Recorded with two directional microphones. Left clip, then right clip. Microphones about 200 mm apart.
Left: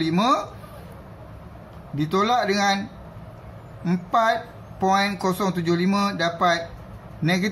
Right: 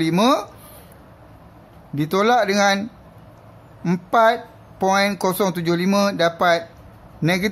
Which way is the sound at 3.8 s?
55° right (ahead or behind).